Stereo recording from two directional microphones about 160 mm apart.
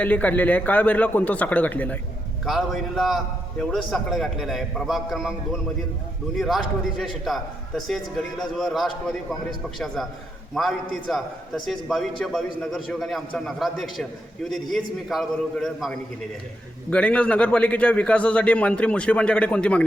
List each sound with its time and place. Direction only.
0.0 s a man's voice: 10° left (ahead or behind)
2.4 s a man's voice: centre (ahead or behind)
6.3 s a man's voice: centre (ahead or behind)